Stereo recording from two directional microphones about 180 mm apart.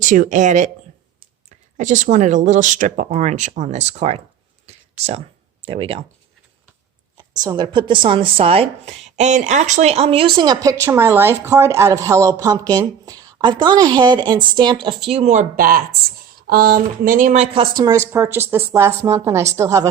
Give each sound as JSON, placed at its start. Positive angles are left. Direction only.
{"t": 0.0, "sound": "speech", "side_deg": -45}
{"t": 1.8, "sound": "speech", "side_deg": -45}
{"t": 4.6, "sound": "a sound", "side_deg": -35}
{"t": 5.6, "sound": "speech", "side_deg": -30}
{"t": 7.4, "sound": "a woman's voice", "side_deg": -25}
{"t": 15.1, "sound": "speech", "side_deg": -40}
{"t": 18.1, "sound": "a woman's voice", "side_deg": -10}